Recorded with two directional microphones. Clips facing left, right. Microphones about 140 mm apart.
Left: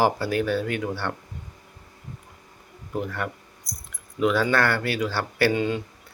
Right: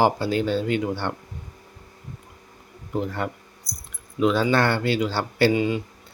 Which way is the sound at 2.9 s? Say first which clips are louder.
Right 2 dB; 25° right (ahead or behind).